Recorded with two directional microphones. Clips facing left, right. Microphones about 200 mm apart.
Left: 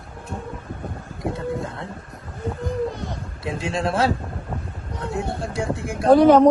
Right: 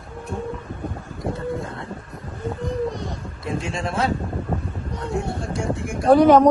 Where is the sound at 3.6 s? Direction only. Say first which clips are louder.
Left 3 dB; centre (ahead or behind).